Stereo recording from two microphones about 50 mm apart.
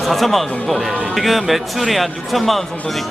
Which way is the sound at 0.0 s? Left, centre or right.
Centre.